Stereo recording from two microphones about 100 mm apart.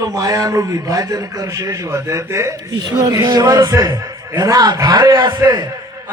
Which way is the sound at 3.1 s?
30° right (ahead or behind).